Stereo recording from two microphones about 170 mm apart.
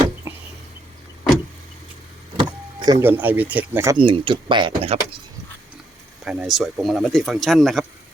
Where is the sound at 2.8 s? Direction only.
20° right (ahead or behind).